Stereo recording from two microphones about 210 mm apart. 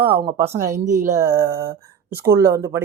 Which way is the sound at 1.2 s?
15° right (ahead or behind).